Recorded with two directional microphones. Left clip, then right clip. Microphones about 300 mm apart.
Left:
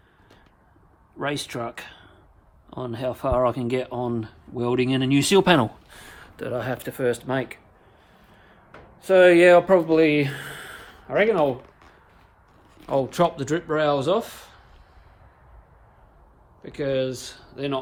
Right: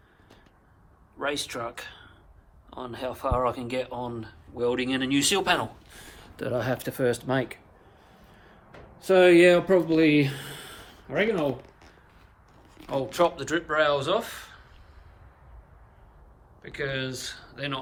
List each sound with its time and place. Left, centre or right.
1.2 s speech: left
6.3 s speech: centre
9.0 s speech: centre; by 11.7 s left
12.9 s speech: left; by 14.6 s centre
16.6 s speech: centre